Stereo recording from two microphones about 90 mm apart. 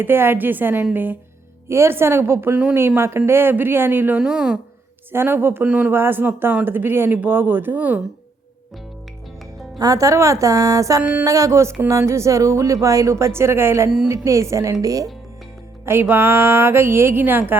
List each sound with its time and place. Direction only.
0.0 s speech: 25° right (ahead or behind)
4.2 s speech: 5° right (ahead or behind)
5.1 s speech: 25° right (ahead or behind)
5.6 s speech: 10° right (ahead or behind)
5.9 s speech: 25° right (ahead or behind)
9.7 s speech: 45° right (ahead or behind)
11.0 s speech: 15° right (ahead or behind)
11.3 s speech: 40° right (ahead or behind)
15.9 s speech: 25° right (ahead or behind)